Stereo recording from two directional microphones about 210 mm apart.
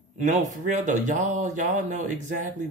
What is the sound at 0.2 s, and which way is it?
Speech, 35° right (ahead or behind).